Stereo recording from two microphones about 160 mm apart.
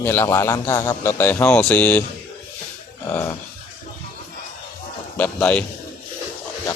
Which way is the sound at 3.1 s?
15° left (ahead or behind).